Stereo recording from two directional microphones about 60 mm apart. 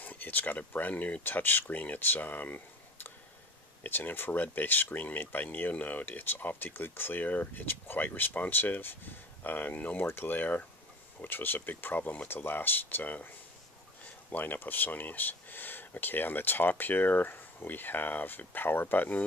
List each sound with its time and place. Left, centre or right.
0.0 s speech: left
14.3 s speech: left